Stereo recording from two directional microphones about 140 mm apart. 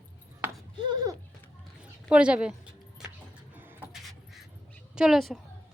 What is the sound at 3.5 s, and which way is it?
Beatboxing, 15° right (ahead or behind).